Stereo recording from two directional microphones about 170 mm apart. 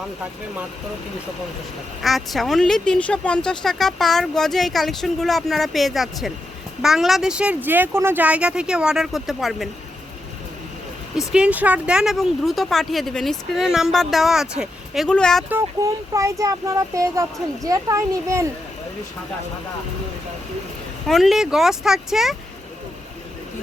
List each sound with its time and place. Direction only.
2.0 s speech: centre (ahead or behind)
11.3 s speech: 5° right (ahead or behind)
15.4 s speech: 15° right (ahead or behind)
21.1 s speech: centre (ahead or behind)